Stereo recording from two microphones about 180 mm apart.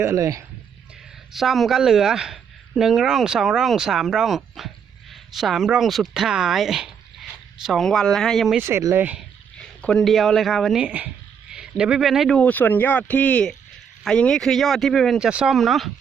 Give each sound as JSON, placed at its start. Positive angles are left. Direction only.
{"t": 0.0, "sound": "speech", "side_deg": -15}
{"t": 1.3, "sound": "speech", "side_deg": 0}
{"t": 8.6, "sound": "speech", "side_deg": -15}
{"t": 9.6, "sound": "speech", "side_deg": 5}